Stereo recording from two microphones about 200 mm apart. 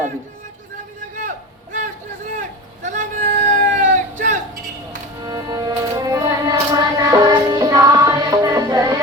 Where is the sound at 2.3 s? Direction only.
40° right (ahead or behind).